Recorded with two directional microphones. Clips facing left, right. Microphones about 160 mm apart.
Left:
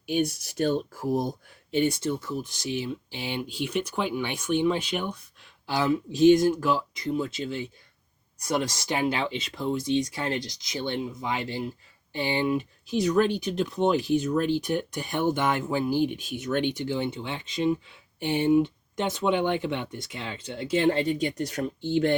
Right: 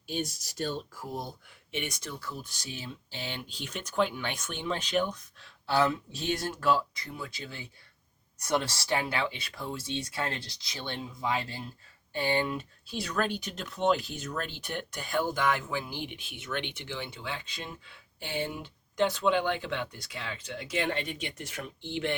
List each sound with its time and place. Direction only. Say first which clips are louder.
0.0 s speech: left 8 dB; 65° left (ahead or behind)
1.5 s speech: left 12 dB; 35° left (ahead or behind); by 10.8 s 20° left (ahead or behind)
12.1 s speech: left 4 dB; 20° left (ahead or behind); by 22.1 s 40° left (ahead or behind)